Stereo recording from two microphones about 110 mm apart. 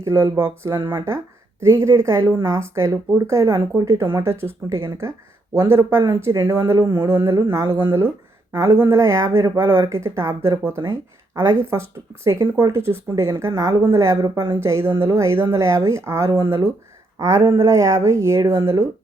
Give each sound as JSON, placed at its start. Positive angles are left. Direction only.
{"t": 0.0, "sound": "speech", "side_deg": -25}